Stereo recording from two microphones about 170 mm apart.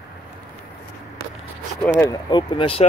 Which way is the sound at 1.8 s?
10° left (ahead or behind).